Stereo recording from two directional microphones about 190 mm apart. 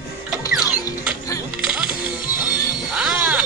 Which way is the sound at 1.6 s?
5° right (ahead or behind).